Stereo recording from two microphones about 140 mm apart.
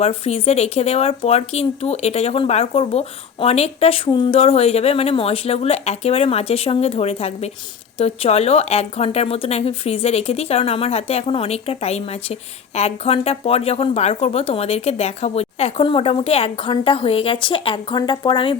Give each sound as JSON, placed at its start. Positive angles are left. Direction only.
{"t": 0.0, "sound": "speech", "side_deg": 45}